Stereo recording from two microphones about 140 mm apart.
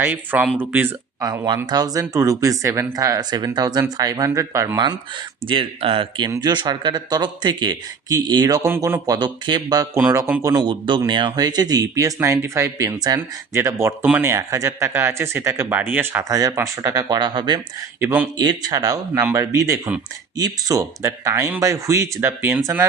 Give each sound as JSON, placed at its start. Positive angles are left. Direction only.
{"t": 0.0, "sound": "speech", "side_deg": -15}
{"t": 1.2, "sound": "speech", "side_deg": -25}
{"t": 5.5, "sound": "speech", "side_deg": -40}
{"t": 8.6, "sound": "speech", "side_deg": -15}
{"t": 9.0, "sound": "speech", "side_deg": -30}
{"t": 10.0, "sound": "speech", "side_deg": -15}
{"t": 10.6, "sound": "speech", "side_deg": -35}
{"t": 18.0, "sound": "speech", "side_deg": -15}
{"t": 18.3, "sound": "speech", "side_deg": -25}